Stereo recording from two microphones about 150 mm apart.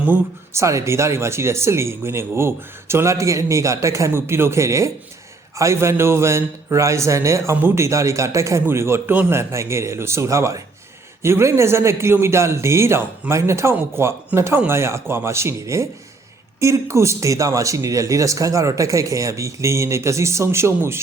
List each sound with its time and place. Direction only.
0.0 s a man's voice: 15° right (ahead or behind)